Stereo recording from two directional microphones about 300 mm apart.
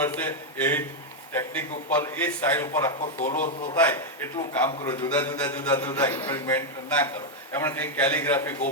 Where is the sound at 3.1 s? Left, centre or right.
Left.